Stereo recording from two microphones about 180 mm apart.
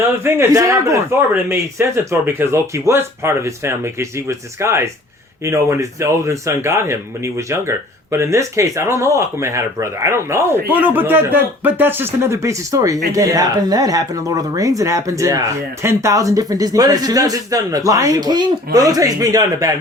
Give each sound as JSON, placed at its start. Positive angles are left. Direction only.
{"t": 0.3, "sound": "a man's voice", "side_deg": -15}